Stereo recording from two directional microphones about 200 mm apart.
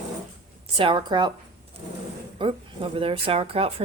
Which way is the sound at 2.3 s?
25° right (ahead or behind).